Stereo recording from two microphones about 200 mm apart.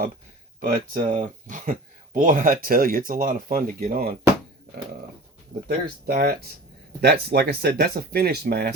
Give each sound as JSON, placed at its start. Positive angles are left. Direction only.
{"t": 0.6, "sound": "speech", "side_deg": -40}
{"t": 5.6, "sound": "speech", "side_deg": -50}